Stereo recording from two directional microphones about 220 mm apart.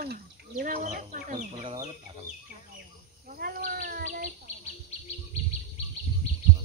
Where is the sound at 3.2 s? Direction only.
40° right (ahead or behind).